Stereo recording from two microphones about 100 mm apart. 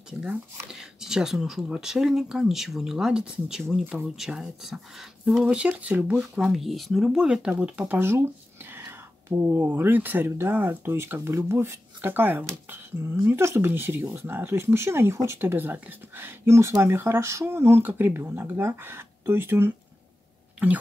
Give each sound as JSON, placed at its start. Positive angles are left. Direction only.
{"t": 0.7, "sound": "speech", "side_deg": -5}